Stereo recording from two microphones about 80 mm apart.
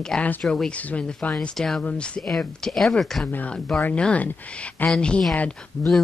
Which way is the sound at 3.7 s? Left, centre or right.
Centre.